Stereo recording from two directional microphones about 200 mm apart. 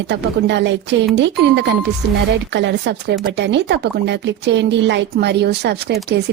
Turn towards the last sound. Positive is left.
turn(degrees=-55)  # may be behind; listen again after turning